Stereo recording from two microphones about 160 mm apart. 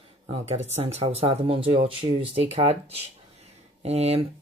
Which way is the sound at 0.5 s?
45° right (ahead or behind).